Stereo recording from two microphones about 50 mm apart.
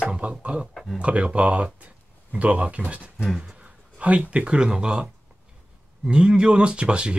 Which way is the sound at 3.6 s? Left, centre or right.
Right.